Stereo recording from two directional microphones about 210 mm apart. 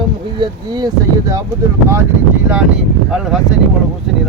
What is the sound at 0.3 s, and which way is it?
Speech, 20° right (ahead or behind).